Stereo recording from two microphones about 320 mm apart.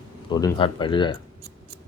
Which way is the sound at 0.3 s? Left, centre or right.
Centre.